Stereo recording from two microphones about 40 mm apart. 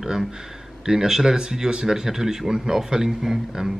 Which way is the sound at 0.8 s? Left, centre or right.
Centre.